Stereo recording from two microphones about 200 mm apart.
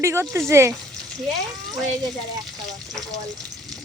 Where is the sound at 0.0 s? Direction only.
15° right (ahead or behind).